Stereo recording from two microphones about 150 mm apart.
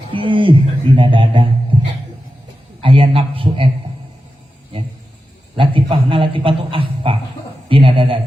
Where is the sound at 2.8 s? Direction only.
35° right (ahead or behind).